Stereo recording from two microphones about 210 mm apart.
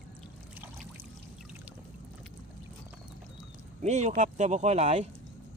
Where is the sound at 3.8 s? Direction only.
30° right (ahead or behind).